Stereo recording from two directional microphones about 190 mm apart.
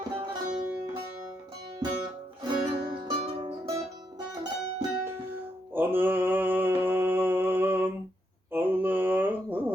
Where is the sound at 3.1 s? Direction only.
30° right (ahead or behind).